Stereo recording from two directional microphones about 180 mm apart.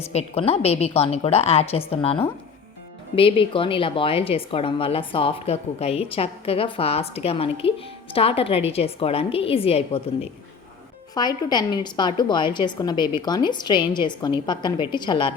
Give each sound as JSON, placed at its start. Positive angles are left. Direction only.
{"t": 0.0, "sound": "a woman's voice", "side_deg": 35}
{"t": 11.1, "sound": "a woman's voice", "side_deg": 25}